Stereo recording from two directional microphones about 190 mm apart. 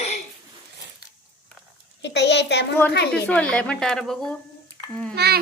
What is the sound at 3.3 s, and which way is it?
A woman's voice, 5° left (ahead or behind).